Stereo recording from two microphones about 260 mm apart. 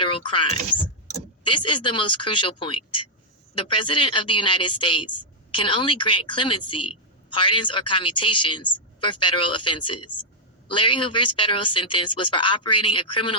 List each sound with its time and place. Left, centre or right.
0.0 s speech: centre
1.5 s speech: centre